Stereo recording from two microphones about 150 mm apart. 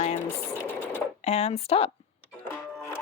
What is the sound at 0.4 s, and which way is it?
Sewing machine, 15° left (ahead or behind).